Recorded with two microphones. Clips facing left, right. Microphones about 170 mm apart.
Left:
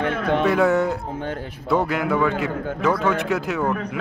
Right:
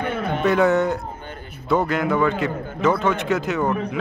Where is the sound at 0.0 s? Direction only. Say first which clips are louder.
Left 2 dB; 90° left.